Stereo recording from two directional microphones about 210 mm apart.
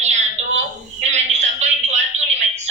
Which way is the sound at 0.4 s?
30° right (ahead or behind).